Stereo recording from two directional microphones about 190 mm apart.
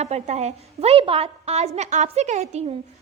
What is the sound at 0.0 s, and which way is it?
A woman's voice, 35° right (ahead or behind).